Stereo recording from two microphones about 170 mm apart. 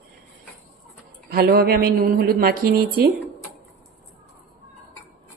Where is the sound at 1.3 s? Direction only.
65° right (ahead or behind).